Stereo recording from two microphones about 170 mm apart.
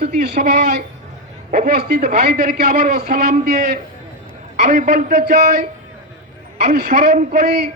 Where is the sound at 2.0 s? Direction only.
45° right (ahead or behind).